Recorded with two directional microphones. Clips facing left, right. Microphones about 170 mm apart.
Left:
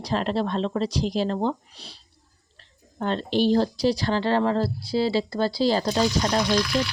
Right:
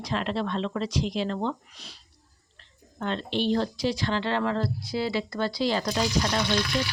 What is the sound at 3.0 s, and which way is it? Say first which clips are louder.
Speech: left 5 dB; 35° left (ahead or behind).